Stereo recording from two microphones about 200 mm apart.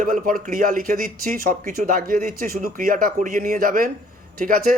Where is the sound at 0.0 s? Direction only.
45° right (ahead or behind).